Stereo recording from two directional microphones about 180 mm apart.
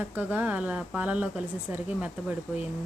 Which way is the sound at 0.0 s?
10° right (ahead or behind).